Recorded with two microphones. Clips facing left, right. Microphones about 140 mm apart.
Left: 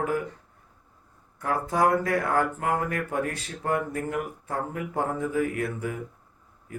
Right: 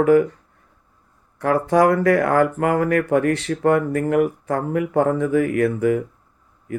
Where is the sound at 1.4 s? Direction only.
90° right.